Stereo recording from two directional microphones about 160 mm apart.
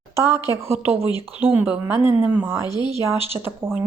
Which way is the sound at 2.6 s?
25° left (ahead or behind).